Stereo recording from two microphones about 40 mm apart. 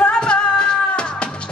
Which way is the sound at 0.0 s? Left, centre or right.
Left.